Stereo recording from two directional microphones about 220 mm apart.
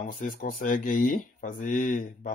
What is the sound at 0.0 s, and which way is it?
Speech, 35° left (ahead or behind).